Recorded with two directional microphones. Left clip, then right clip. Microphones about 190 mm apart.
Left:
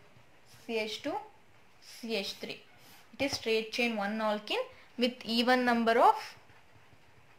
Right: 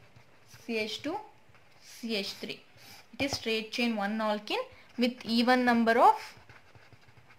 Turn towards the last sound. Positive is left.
turn(degrees=-20)  # may be behind; listen again after turning